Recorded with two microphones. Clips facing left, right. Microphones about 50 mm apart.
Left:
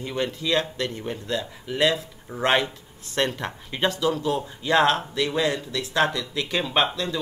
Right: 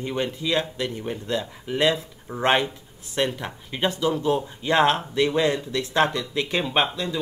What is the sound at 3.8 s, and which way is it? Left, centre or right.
Speech, right.